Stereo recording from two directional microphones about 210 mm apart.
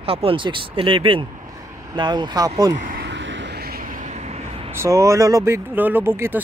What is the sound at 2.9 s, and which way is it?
Vehicle, 55° right (ahead or behind).